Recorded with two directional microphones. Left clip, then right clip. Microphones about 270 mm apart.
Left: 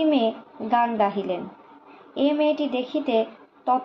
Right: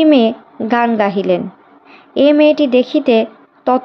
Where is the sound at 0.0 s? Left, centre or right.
Right.